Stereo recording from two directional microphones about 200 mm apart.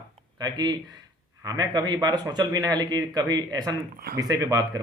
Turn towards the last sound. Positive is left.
turn(degrees=-15)  # may be behind; listen again after turning